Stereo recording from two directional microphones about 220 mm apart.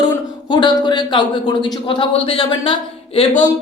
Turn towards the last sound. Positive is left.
turn(degrees=25)  # may be behind; listen again after turning